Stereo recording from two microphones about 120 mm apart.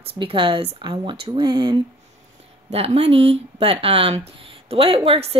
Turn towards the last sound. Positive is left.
turn(degrees=-55)  # may be behind; listen again after turning